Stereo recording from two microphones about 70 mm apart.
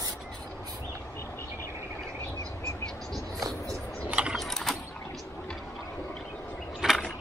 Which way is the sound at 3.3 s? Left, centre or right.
Right.